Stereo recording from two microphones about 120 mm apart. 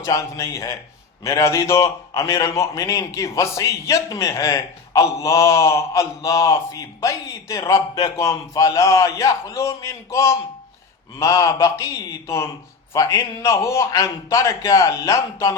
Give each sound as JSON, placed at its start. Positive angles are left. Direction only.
{"t": 0.0, "sound": "a man's voice", "side_deg": 25}